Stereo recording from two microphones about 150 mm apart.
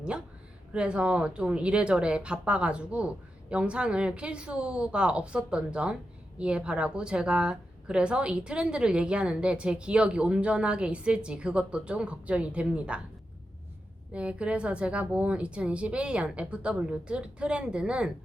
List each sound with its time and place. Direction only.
0.7 s a woman's voice: 5° right (ahead or behind)
14.1 s a woman's voice: 10° right (ahead or behind)